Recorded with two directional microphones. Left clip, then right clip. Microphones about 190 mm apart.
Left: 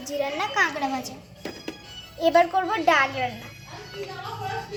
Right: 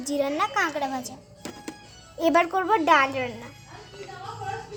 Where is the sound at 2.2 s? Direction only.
55° right (ahead or behind).